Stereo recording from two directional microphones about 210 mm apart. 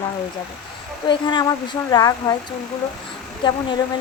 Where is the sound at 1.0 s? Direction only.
20° left (ahead or behind).